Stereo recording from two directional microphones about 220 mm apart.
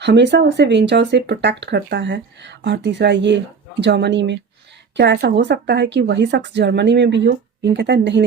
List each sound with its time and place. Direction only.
0.0 s speech: 50° right (ahead or behind)